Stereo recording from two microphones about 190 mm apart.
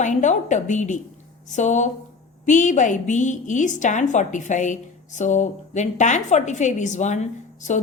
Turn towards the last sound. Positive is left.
turn(degrees=40)  # may be behind; listen again after turning